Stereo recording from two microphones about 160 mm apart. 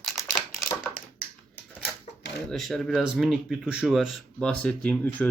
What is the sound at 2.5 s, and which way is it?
Speech, centre (ahead or behind).